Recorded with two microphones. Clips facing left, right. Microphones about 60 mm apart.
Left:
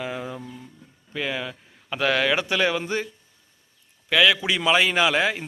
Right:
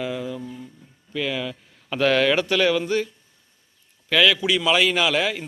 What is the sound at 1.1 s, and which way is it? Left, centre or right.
Speech, left.